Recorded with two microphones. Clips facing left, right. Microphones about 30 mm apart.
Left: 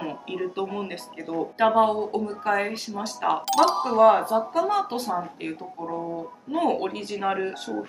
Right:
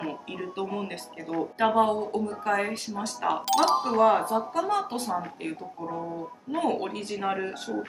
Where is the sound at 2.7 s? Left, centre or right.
Left.